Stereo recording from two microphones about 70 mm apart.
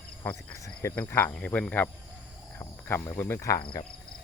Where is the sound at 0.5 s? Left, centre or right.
Left.